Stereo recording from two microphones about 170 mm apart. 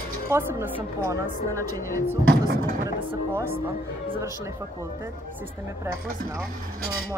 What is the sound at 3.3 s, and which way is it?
Speech, 15° right (ahead or behind).